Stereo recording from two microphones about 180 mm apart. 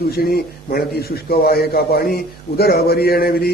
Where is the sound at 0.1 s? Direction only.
55° left (ahead or behind).